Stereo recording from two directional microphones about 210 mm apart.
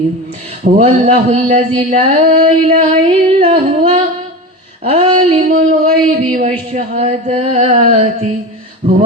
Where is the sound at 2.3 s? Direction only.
45° right (ahead or behind).